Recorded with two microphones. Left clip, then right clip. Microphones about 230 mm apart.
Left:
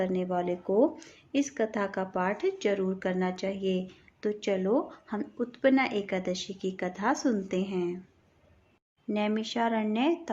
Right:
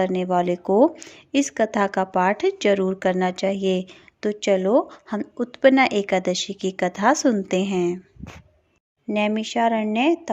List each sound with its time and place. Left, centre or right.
0.0 s speech: right
9.0 s speech: right